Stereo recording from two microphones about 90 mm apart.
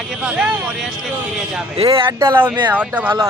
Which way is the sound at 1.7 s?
90° right.